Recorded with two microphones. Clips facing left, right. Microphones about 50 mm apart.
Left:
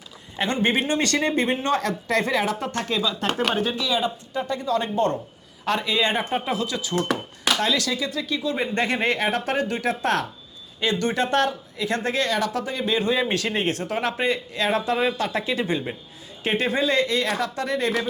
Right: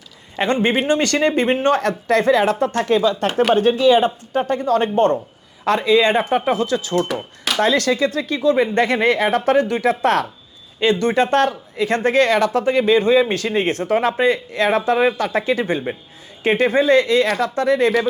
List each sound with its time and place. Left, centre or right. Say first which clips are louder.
0.3 s speech: right 5 dB; right